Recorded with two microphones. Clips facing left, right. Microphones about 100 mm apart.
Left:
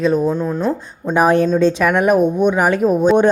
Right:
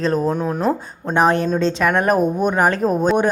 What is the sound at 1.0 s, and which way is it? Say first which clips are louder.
Speech: left 3 dB; centre (ahead or behind).